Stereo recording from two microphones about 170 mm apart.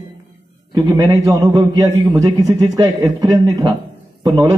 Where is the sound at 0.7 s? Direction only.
25° right (ahead or behind).